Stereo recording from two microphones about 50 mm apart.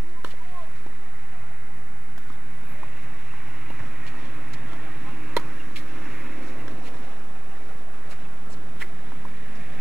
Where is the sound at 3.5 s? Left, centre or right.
Centre.